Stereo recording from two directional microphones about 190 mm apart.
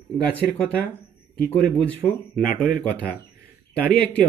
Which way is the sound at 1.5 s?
5° left (ahead or behind).